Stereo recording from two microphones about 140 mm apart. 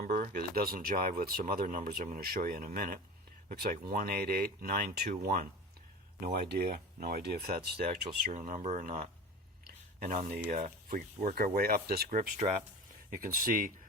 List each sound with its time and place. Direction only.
0.0 s speech: 85° right
8.3 s speech: 60° right (ahead or behind)
9.6 s a sound: 75° right (ahead or behind)
10.8 s speech: 70° right (ahead or behind); by 12.3 s 90° right
13.1 s speech: 75° right (ahead or behind)